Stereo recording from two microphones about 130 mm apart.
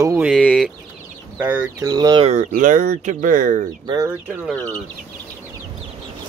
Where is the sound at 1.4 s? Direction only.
15° right (ahead or behind).